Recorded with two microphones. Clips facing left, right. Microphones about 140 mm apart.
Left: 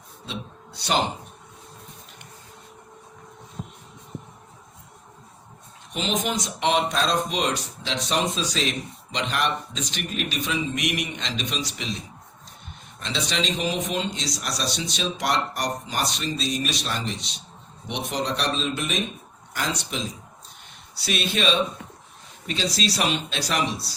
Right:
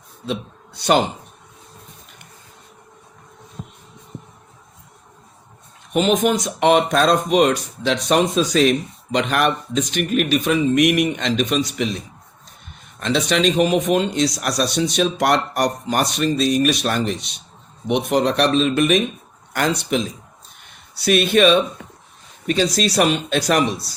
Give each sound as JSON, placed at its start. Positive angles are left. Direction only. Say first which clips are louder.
{"t": 0.3, "sound": "a man's voice", "louder": "right 9 dB", "side_deg": -50}
{"t": 5.9, "sound": "speech", "louder": "right 10 dB", "side_deg": -55}